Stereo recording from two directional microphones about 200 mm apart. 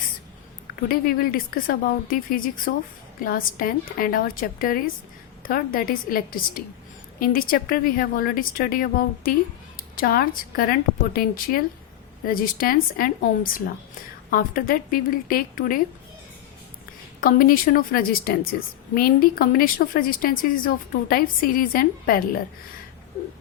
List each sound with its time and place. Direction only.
0.9 s a woman's voice: 45° left (ahead or behind)
17.2 s a woman's voice: 45° left (ahead or behind)